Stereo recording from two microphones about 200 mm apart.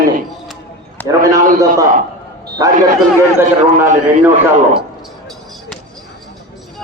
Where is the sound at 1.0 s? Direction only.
10° left (ahead or behind).